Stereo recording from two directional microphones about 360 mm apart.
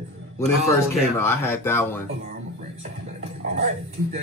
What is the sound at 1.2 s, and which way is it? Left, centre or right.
Speech, centre.